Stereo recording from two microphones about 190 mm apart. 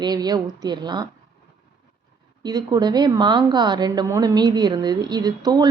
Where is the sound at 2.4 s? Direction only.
20° right (ahead or behind).